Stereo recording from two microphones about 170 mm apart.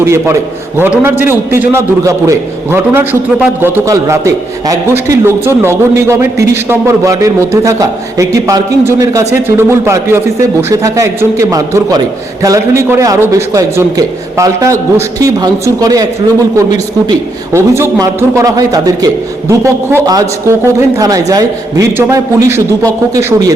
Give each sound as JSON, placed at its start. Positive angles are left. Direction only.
{"t": 0.0, "sound": "a man's voice", "side_deg": -15}